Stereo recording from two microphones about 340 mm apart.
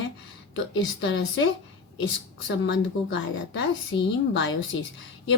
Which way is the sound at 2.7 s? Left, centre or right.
Left.